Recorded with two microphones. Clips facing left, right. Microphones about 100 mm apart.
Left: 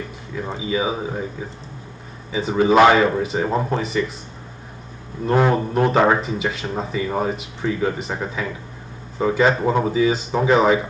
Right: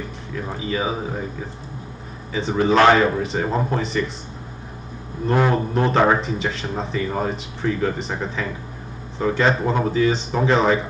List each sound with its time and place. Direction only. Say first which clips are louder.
0.6 s speech: left 2 dB; 5° left (ahead or behind)
2.3 s speech: left 2 dB; 5° left (ahead or behind)
5.2 s speech: left 2 dB; 5° left (ahead or behind)